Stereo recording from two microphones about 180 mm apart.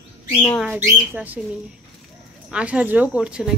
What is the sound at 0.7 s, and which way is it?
Speech, 10° right (ahead or behind).